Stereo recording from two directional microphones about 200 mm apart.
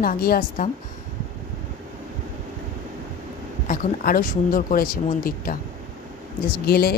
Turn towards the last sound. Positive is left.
turn(degrees=50)  # may be behind; listen again after turning